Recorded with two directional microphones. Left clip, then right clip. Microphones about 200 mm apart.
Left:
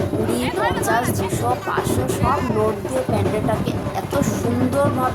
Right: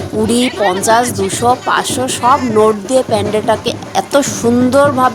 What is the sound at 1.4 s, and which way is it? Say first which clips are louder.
A woman's voice: right 10 dB; 55° left (ahead or behind).